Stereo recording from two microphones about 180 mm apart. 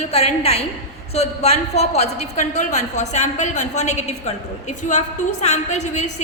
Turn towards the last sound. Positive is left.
turn(degrees=40)  # may be behind; listen again after turning